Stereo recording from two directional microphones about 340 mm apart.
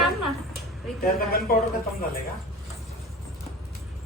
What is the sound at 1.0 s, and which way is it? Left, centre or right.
Speech, left.